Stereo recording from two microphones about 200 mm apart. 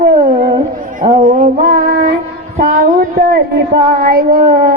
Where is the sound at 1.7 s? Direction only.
55° right (ahead or behind).